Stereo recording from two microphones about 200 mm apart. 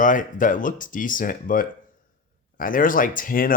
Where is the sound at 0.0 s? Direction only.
40° left (ahead or behind).